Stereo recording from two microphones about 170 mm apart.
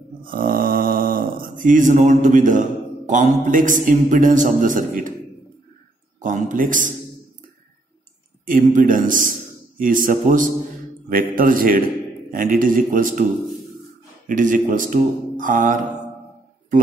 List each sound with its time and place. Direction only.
0.2 s a man's voice: 55° right (ahead or behind)
6.1 s a sound: 50° right (ahead or behind)
8.5 s a man's voice: 55° right (ahead or behind)
14.2 s a man's voice: 50° right (ahead or behind)